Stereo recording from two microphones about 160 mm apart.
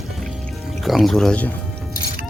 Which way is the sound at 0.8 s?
Centre (ahead or behind).